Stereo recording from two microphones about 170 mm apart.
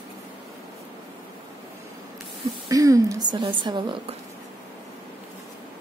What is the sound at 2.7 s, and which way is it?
A woman's voice, 20° right (ahead or behind).